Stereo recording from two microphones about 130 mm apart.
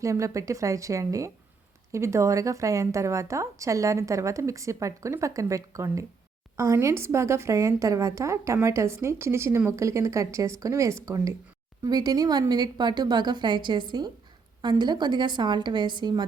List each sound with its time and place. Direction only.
0.0 s a woman's voice: 25° right (ahead or behind)